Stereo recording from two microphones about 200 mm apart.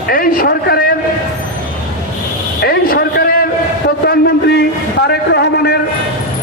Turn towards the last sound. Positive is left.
turn(degrees=55)  # may be behind; listen again after turning